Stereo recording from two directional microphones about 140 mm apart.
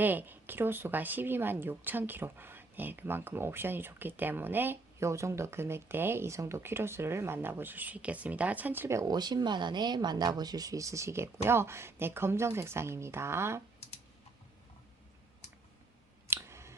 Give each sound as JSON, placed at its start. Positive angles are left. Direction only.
{"t": 0.0, "sound": "speech", "side_deg": -15}
{"t": 16.3, "sound": "clicking", "side_deg": -20}